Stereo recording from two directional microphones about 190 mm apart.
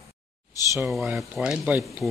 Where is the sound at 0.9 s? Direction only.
Centre (ahead or behind).